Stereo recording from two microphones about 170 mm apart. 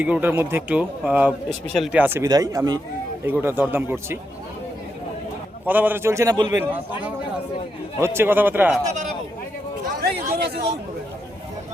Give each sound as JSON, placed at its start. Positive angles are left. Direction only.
{"t": 0.0, "sound": "speech", "side_deg": -10}
{"t": 5.6, "sound": "speech", "side_deg": -10}
{"t": 6.6, "sound": "speech", "side_deg": -10}
{"t": 10.0, "sound": "a sound", "side_deg": -65}
{"t": 10.3, "sound": "a man's voice", "side_deg": -70}